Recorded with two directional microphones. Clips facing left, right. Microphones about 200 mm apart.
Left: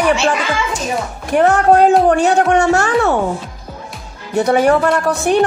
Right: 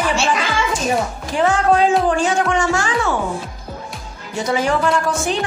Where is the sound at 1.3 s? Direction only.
60° left (ahead or behind).